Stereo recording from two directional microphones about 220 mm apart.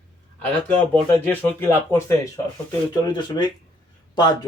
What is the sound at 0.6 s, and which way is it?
Speech, 10° left (ahead or behind).